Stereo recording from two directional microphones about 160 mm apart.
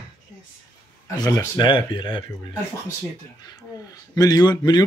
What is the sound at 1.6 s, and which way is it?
Speech, 30° left (ahead or behind).